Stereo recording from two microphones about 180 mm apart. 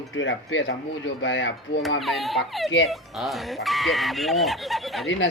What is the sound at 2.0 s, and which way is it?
Speech, centre (ahead or behind).